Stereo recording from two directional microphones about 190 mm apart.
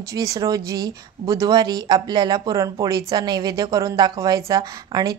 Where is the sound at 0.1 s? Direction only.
20° right (ahead or behind).